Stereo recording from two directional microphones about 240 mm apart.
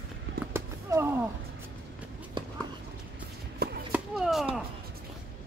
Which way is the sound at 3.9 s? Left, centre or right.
Centre.